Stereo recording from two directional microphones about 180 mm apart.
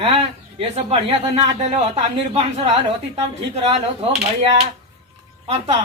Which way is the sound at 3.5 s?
35° right (ahead or behind).